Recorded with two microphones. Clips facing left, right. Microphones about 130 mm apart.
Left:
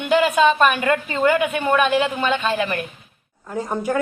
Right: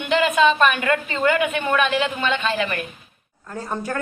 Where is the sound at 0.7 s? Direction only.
25° left (ahead or behind).